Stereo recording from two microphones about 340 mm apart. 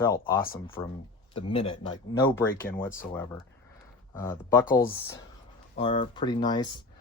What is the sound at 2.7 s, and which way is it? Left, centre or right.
Speech, centre.